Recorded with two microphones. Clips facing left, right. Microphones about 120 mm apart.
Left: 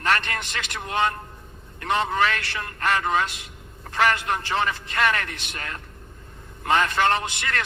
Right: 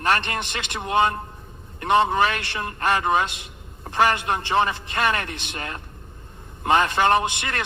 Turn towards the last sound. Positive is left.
turn(degrees=-20)  # may be behind; listen again after turning